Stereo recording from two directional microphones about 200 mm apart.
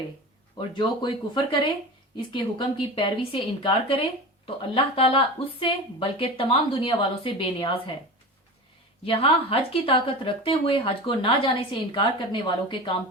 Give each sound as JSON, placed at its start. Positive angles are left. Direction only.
{"t": 0.8, "sound": "a woman's voice", "side_deg": 25}
{"t": 9.0, "sound": "a woman's voice", "side_deg": 30}